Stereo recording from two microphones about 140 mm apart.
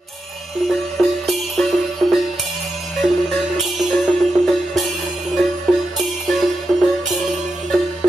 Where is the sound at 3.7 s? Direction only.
Centre (ahead or behind).